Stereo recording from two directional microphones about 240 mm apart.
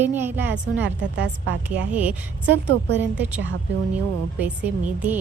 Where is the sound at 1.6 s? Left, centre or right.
Centre.